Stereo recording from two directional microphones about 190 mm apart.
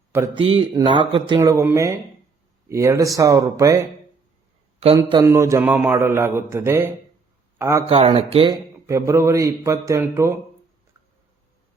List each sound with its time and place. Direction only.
0.3 s a man's voice: 25° right (ahead or behind)
4.9 s a man's voice: 20° right (ahead or behind)
7.9 s speech: 30° right (ahead or behind)
8.9 s a man's voice: 15° right (ahead or behind)